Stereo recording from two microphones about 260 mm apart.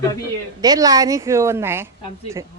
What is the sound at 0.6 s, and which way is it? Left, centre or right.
Speech, centre.